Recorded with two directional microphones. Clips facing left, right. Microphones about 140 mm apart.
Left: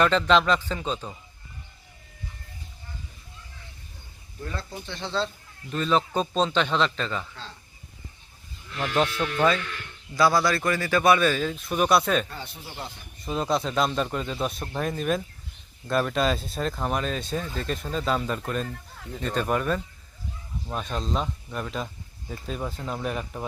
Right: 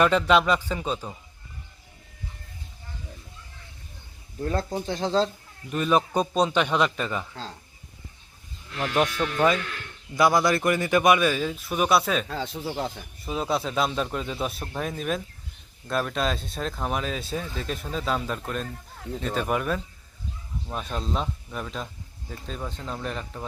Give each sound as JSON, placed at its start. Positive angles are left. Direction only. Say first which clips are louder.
{"t": 0.0, "sound": "a man's voice", "louder": "right 1 dB", "side_deg": -10}
{"t": 4.4, "sound": "speech", "louder": "right 9 dB", "side_deg": -45}
{"t": 5.7, "sound": "a man's voice", "louder": "right 1 dB", "side_deg": -10}
{"t": 9.0, "sound": "a man's voice", "louder": "right 1 dB", "side_deg": -10}
{"t": 12.3, "sound": "speech", "louder": "right 9 dB", "side_deg": -90}
{"t": 13.2, "sound": "speech", "louder": "left 1 dB", "side_deg": -5}